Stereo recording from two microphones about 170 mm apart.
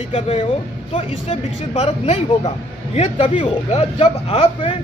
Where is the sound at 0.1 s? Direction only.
35° left (ahead or behind).